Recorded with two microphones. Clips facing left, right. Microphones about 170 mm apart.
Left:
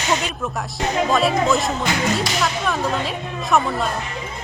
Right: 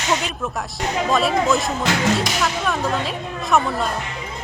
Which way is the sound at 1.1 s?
Centre (ahead or behind).